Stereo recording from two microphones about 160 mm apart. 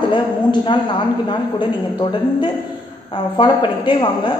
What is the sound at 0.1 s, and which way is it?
Speech, 30° left (ahead or behind).